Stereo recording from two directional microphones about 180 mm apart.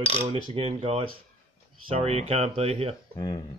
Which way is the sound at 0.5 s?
30° right (ahead or behind).